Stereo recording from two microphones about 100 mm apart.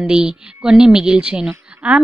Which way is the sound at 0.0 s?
10° right (ahead or behind).